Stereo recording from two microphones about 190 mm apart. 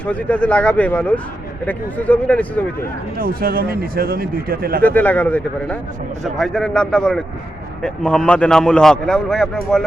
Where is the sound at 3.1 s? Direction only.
50° right (ahead or behind).